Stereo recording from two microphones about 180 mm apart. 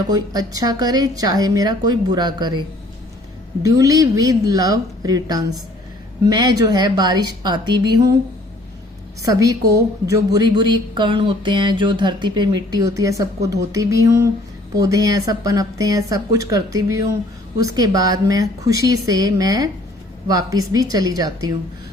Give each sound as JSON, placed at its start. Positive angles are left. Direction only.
{"t": 0.1, "sound": "speech", "side_deg": -20}
{"t": 3.6, "sound": "speech", "side_deg": -20}
{"t": 9.3, "sound": "speech", "side_deg": -20}